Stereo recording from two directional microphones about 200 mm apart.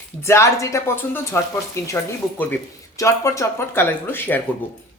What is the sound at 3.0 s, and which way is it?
Speech, 15° left (ahead or behind).